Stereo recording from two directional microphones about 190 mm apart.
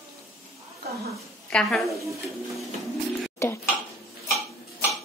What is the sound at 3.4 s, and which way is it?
Dishes, 15° left (ahead or behind).